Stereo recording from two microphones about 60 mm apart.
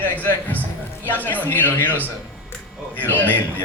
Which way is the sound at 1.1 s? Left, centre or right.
Left.